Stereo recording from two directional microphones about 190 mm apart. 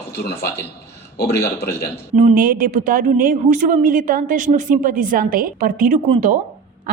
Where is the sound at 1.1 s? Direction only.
60° left (ahead or behind).